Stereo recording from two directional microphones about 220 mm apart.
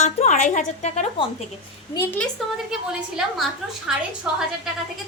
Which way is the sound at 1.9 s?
10° left (ahead or behind).